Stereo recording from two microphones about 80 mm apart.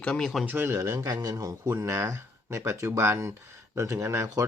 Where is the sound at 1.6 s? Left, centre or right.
Right.